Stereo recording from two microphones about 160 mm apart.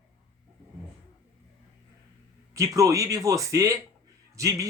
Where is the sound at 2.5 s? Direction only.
20° right (ahead or behind).